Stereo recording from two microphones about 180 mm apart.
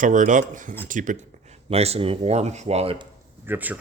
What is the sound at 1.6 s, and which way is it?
Speech, 35° right (ahead or behind).